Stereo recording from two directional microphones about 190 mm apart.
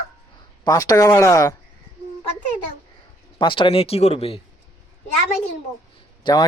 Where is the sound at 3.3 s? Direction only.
25° left (ahead or behind).